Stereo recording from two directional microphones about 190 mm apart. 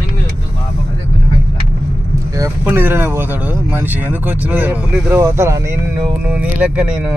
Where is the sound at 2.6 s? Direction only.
10° right (ahead or behind).